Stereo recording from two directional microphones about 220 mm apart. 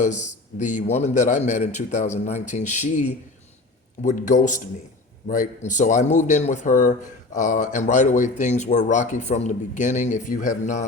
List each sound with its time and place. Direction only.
0.0 s speech: 35° left (ahead or behind)
4.0 s speech: 35° left (ahead or behind)